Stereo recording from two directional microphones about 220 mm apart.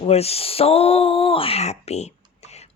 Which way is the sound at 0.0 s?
30° left (ahead or behind).